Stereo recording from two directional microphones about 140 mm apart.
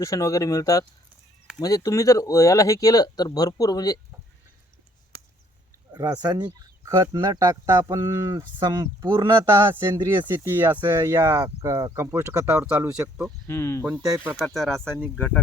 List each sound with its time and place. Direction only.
0.0 s speech: 20° left (ahead or behind)
5.9 s speech: 25° right (ahead or behind)
10.2 s speech: 15° right (ahead or behind)
13.5 s speech: 20° left (ahead or behind)
14.3 s speech: centre (ahead or behind)
14.8 s speech: 10° right (ahead or behind)